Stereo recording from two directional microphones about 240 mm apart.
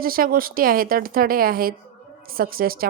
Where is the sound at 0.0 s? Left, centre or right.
Right.